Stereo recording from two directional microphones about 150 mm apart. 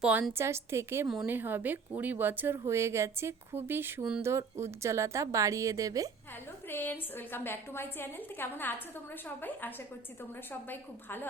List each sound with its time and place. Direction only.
0.0 s speech: 10° right (ahead or behind)
1.0 s a woman's voice: centre (ahead or behind)
1.3 s a woman's voice: 15° right (ahead or behind)
6.7 s a woman's voice: 15° left (ahead or behind)